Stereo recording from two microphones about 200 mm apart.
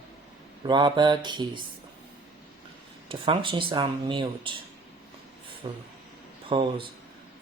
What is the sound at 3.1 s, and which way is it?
Speech, 25° right (ahead or behind).